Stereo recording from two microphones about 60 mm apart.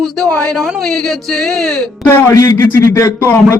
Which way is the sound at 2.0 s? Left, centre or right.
Left.